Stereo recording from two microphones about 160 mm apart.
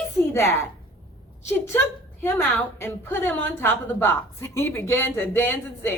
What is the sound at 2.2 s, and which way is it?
A woman's voice, 15° left (ahead or behind).